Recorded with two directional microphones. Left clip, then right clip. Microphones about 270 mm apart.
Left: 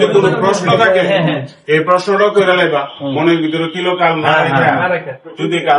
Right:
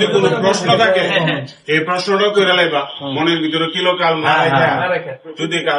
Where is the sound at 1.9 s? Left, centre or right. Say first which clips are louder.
Left 5 dB; centre.